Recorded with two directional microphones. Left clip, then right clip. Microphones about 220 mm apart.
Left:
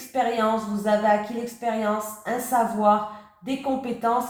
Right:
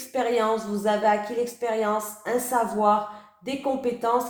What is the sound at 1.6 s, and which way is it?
Speech, 45° right (ahead or behind).